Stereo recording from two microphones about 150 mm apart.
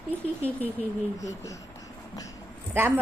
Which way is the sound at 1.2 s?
20° left (ahead or behind).